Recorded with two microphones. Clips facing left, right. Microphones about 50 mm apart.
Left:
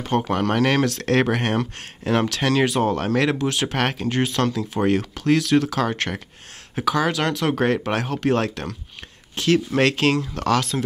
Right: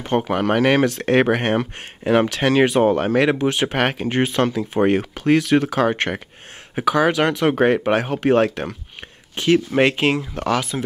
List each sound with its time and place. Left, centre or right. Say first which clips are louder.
0.0 s speech: right 2 dB; centre